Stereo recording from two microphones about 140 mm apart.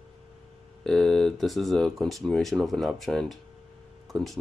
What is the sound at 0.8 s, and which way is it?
Speech, 5° left (ahead or behind).